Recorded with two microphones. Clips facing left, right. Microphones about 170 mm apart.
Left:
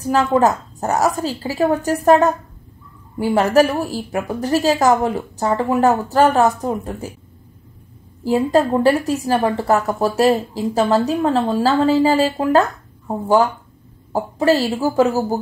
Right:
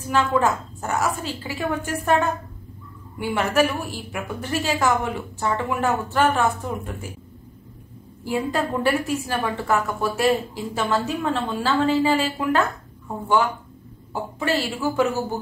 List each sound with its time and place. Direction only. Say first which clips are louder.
0.0 s a woman's voice: left 5 dB; 40° left (ahead or behind)
8.2 s a woman's voice: left 8 dB; 40° left (ahead or behind)